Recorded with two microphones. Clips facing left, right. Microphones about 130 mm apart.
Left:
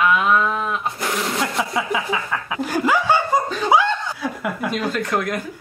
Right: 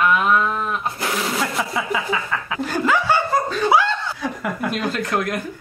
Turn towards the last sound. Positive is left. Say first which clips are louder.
# even
turn(degrees=0)  # may be behind; listen again after turning